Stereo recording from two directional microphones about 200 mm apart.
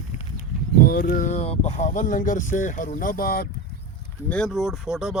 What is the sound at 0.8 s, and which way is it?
Speech, 45° left (ahead or behind).